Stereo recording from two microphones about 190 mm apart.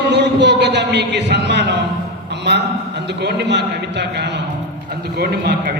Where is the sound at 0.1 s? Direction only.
65° right (ahead or behind).